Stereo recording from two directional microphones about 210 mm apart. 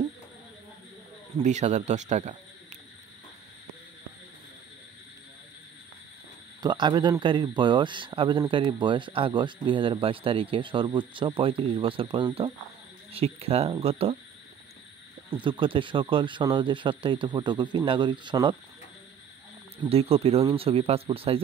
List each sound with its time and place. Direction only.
1.4 s speech: 35° right (ahead or behind)
6.6 s speech: 20° right (ahead or behind)
15.3 s speech: 25° right (ahead or behind)
19.8 s speech: 30° right (ahead or behind)